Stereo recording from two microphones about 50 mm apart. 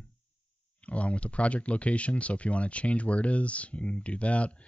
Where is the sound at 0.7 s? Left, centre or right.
Left.